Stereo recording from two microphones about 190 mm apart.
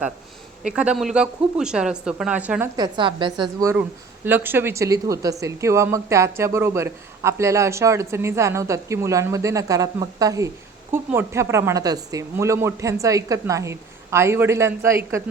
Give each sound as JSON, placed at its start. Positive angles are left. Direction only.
{"t": 0.6, "sound": "speech", "side_deg": -5}
{"t": 2.7, "sound": "a woman's voice", "side_deg": -20}